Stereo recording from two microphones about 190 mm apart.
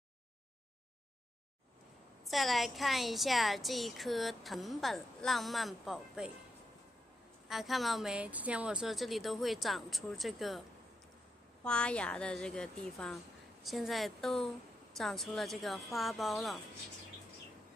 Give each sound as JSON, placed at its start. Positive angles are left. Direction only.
{"t": 2.2, "sound": "a woman's voice", "side_deg": 0}
{"t": 7.4, "sound": "a woman's voice", "side_deg": 0}
{"t": 11.6, "sound": "a woman's voice", "side_deg": 5}